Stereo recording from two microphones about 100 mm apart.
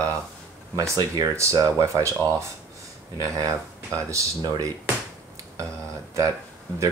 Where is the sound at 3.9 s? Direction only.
30° right (ahead or behind).